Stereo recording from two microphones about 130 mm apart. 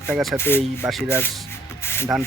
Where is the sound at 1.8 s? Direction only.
20° left (ahead or behind).